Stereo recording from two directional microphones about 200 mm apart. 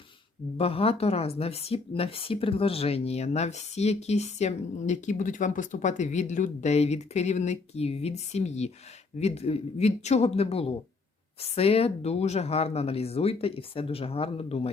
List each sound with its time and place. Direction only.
0.5 s speech: 30° left (ahead or behind)